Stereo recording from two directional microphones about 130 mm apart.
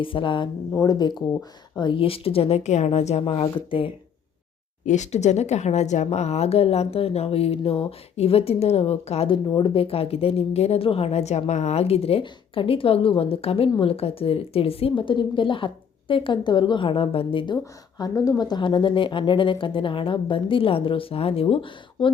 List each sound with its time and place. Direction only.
0.0 s speech: 40° left (ahead or behind)
1.8 s a woman's voice: 40° left (ahead or behind)
4.9 s a woman's voice: 65° left (ahead or behind); by 22.1 s 45° left (ahead or behind)